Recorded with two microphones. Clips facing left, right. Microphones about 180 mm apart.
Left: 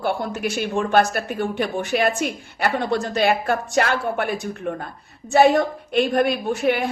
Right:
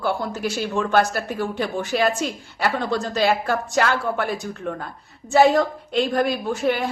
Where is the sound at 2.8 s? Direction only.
60° left (ahead or behind).